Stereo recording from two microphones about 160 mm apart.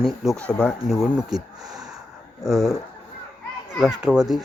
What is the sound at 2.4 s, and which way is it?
Speech, centre (ahead or behind).